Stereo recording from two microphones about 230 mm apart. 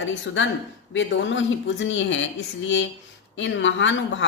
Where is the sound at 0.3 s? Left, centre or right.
Left.